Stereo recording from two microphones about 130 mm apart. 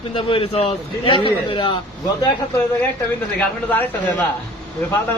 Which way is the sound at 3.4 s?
15° left (ahead or behind).